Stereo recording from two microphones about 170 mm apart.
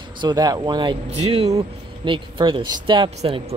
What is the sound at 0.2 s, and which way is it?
Speech, 25° right (ahead or behind).